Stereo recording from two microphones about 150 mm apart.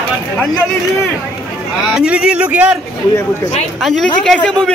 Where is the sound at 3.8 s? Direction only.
5° left (ahead or behind).